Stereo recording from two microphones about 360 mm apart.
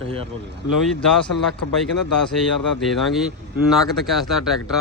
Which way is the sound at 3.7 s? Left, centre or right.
Centre.